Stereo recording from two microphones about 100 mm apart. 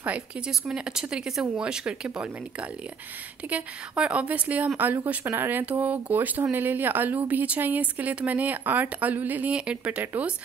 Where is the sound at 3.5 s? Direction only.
10° right (ahead or behind).